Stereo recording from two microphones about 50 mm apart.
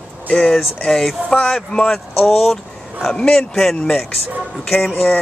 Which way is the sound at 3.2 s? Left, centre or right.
Centre.